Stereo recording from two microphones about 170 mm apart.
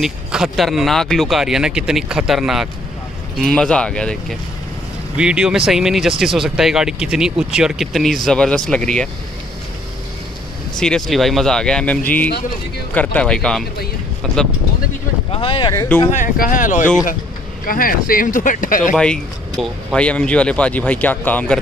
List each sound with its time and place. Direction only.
0.0 s speech: 5° right (ahead or behind)
10.8 s speech: 5° left (ahead or behind)
15.3 s speech: 30° left (ahead or behind)
15.7 s speech: 15° left (ahead or behind)
16.1 s speech: 50° left (ahead or behind)
19.6 s speech: 5° left (ahead or behind)